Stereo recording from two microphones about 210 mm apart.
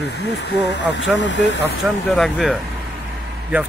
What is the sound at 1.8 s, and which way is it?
Speech, centre (ahead or behind).